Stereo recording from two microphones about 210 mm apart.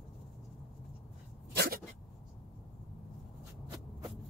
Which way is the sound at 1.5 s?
50° right (ahead or behind).